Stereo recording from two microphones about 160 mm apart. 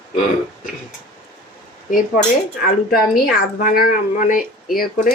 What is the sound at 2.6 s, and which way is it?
Speech, 65° left (ahead or behind).